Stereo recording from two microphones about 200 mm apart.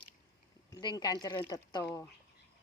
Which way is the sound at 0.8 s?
20° left (ahead or behind).